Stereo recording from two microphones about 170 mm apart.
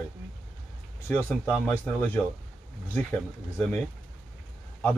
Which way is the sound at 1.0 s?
10° left (ahead or behind).